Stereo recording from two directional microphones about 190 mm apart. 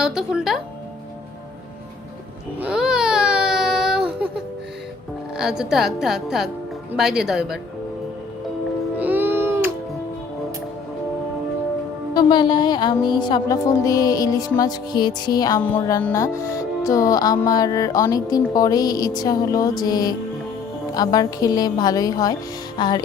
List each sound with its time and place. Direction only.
0.0 s a woman's voice: 5° right (ahead or behind)
2.6 s baby cry: 5° right (ahead or behind)
5.4 s a woman's voice: 5° right (ahead or behind)
9.0 s music: 10° right (ahead or behind)
12.1 s music: 25° left (ahead or behind)